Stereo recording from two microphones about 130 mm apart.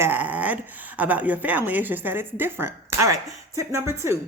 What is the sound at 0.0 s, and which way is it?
A woman's voice, 15° right (ahead or behind).